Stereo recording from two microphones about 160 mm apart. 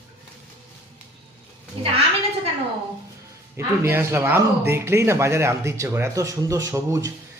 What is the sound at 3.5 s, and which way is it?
Speech, 15° right (ahead or behind).